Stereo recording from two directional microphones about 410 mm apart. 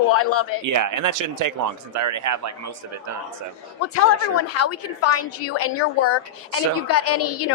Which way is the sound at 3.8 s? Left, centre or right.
Left.